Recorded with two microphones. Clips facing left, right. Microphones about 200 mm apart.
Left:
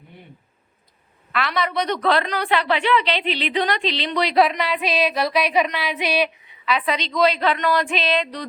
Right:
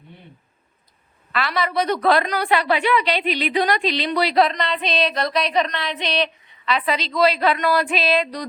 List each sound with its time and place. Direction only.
1.3 s a woman's voice: centre (ahead or behind)
3.2 s speech: 40° right (ahead or behind)
3.5 s a sound: 10° right (ahead or behind)